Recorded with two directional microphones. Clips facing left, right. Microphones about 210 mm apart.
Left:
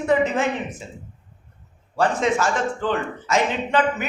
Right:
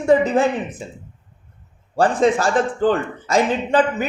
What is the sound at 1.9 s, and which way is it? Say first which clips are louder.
A man's voice: right 4 dB; 35° right (ahead or behind).